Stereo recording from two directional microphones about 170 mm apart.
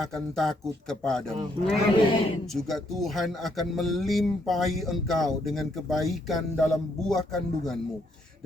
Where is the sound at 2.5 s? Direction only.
Centre (ahead or behind).